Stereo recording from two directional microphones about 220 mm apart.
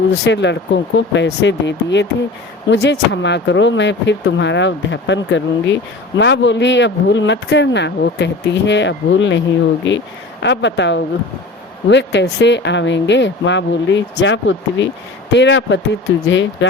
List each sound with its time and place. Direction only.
0.3 s speech: 55° left (ahead or behind)